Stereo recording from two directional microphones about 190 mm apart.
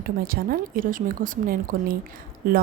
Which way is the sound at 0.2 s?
50° right (ahead or behind).